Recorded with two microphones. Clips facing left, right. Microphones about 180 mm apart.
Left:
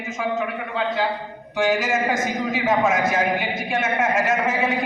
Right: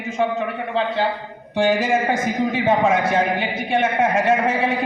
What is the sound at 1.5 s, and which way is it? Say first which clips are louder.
A man's voice: right 3 dB; 30° right (ahead or behind).